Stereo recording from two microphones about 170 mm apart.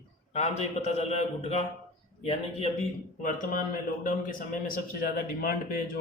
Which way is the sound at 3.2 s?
50° left (ahead or behind).